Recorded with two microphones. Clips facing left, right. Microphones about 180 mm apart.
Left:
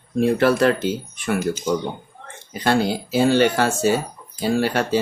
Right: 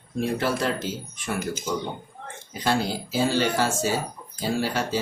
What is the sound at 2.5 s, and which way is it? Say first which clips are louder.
Speech: left 5 dB; 65° left (ahead or behind).